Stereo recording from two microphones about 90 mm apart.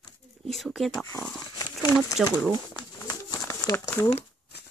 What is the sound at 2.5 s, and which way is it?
Bird, 50° left (ahead or behind).